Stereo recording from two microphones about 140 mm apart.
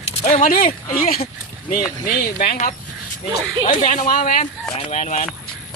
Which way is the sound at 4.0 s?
80° left.